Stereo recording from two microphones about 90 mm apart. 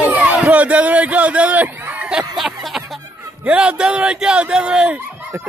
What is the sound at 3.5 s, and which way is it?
Speech, 10° right (ahead or behind).